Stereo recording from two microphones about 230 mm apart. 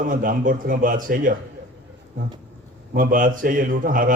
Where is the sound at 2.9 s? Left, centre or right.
Right.